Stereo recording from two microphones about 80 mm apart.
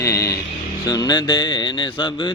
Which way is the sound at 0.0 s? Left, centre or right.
Left.